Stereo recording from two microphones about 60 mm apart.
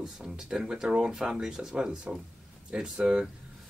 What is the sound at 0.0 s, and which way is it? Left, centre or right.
Speech, centre.